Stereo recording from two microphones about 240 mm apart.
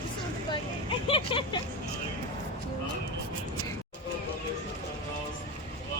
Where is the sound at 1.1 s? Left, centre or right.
Left.